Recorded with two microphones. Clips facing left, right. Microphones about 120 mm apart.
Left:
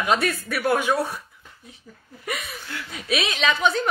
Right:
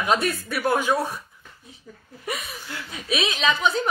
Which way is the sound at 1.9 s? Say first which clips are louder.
Right 5 dB; centre (ahead or behind).